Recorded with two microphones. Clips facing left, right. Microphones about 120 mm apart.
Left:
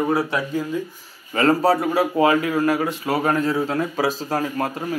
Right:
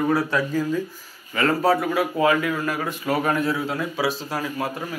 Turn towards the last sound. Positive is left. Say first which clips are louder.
# left 4 dB
turn(degrees=45)  # may be behind; listen again after turning